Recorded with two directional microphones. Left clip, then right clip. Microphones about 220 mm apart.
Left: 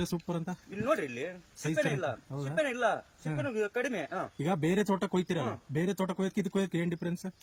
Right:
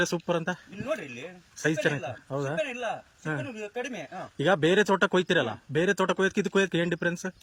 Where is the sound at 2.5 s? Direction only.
20° left (ahead or behind).